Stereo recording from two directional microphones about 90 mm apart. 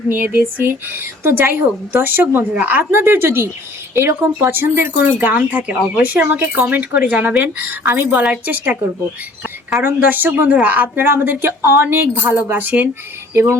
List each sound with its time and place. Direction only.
0.2 s a woman's voice: 25° right (ahead or behind)
9.8 s a woman's voice: 20° right (ahead or behind)